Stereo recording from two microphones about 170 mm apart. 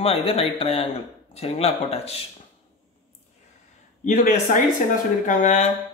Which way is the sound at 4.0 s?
50° left (ahead or behind).